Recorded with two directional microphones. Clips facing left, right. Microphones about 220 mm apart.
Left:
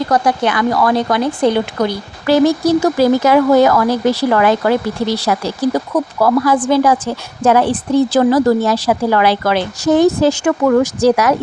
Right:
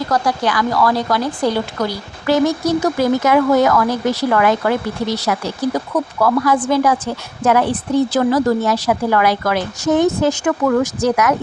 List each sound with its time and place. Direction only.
0.1 s speech: 20° left (ahead or behind)
2.2 s a woman's voice: 30° left (ahead or behind)